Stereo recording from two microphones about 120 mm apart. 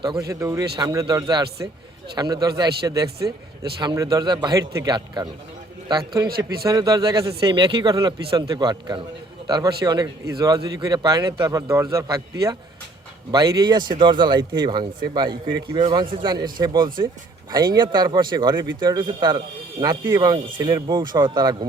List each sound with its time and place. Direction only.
0.0 s speech: 35° right (ahead or behind)
4.7 s a man's voice: 25° right (ahead or behind)
4.9 s speech: 35° right (ahead or behind)
6.7 s a man's voice: 30° right (ahead or behind)
7.4 s speech: 40° right (ahead or behind)